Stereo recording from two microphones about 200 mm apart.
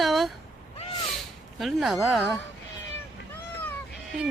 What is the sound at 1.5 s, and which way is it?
Speech, centre (ahead or behind).